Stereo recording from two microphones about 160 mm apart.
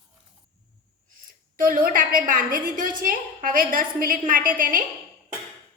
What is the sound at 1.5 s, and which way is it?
A woman's voice, 60° right (ahead or behind).